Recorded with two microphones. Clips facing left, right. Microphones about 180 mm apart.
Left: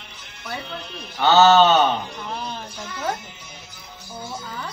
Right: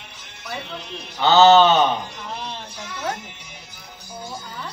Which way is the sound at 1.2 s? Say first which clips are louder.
Right 2 dB; 15° right (ahead or behind).